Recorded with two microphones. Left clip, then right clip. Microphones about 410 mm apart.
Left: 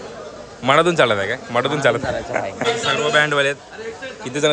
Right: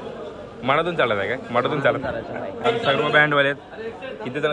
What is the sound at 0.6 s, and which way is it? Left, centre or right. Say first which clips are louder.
A man's voice: left 6 dB; centre.